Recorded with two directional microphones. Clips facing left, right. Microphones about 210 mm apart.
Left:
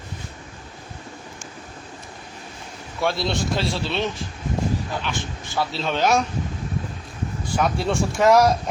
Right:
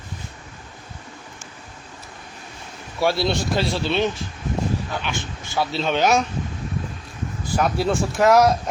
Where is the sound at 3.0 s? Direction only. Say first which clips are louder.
Right 3 dB; centre (ahead or behind).